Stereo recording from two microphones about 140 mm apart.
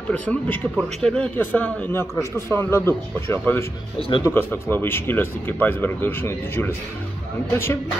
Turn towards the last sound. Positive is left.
turn(degrees=15)  # may be behind; listen again after turning